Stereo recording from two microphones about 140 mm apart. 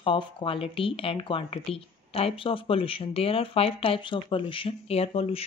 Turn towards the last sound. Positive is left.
turn(degrees=45)  # may be behind; listen again after turning